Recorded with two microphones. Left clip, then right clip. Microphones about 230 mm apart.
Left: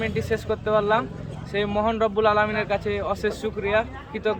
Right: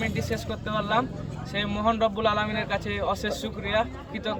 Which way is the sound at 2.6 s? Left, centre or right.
Centre.